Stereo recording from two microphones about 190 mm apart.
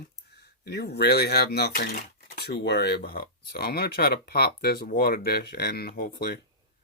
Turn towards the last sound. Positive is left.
turn(degrees=55)  # may be behind; listen again after turning